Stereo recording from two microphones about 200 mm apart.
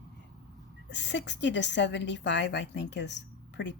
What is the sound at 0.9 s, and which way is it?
A woman's voice, 60° left (ahead or behind).